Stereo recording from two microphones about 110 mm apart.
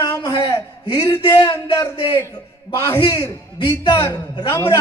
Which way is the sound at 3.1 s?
25° left (ahead or behind).